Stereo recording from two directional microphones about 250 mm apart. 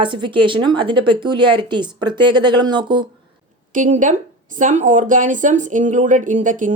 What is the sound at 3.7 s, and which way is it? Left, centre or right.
A woman's voice, right.